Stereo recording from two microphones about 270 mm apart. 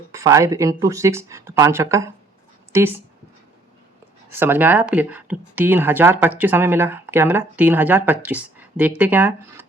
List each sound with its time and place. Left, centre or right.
0.1 s speech: centre
4.3 s speech: centre
8.5 s a sound: centre
9.0 s speech: centre